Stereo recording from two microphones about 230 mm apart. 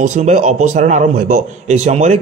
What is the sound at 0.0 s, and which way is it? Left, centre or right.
Speech, right.